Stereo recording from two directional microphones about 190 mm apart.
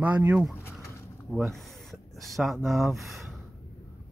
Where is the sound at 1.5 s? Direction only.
Centre (ahead or behind).